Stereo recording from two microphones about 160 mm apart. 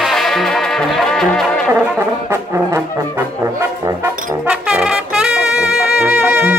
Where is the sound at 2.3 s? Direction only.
15° right (ahead or behind).